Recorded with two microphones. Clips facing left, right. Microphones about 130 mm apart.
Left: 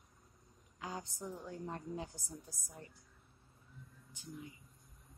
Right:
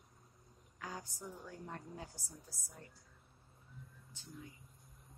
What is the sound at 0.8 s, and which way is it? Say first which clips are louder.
A woman's voice: left 3 dB; 20° left (ahead or behind).